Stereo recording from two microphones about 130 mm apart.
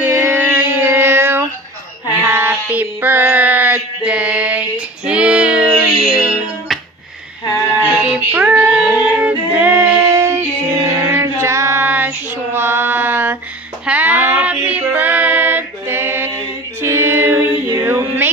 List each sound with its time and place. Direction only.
0.0 s music: 15° right (ahead or behind)
2.2 s a sound: 15° right (ahead or behind)
8.0 s child singing: 10° right (ahead or behind)
9.2 s music: 15° right (ahead or behind)
13.8 s child singing: 10° right (ahead or behind)
16.8 s music: 20° right (ahead or behind)